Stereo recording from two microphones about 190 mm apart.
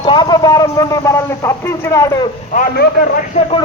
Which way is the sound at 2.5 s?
50° left (ahead or behind).